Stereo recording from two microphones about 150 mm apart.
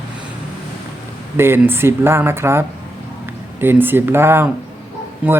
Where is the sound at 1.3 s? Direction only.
15° right (ahead or behind).